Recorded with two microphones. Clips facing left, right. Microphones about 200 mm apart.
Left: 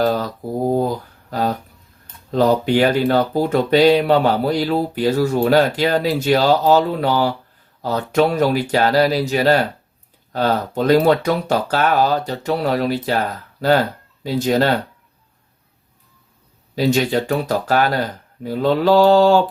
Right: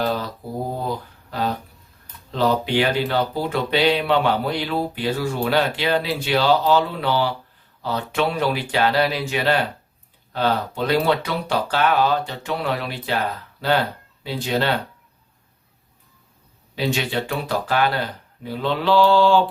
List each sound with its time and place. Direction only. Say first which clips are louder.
0.0 s a sound: left 5 dB; 45° left (ahead or behind)
2.3 s speech: left 5 dB; 45° left (ahead or behind)
16.7 s speech: left 6 dB; 40° left (ahead or behind)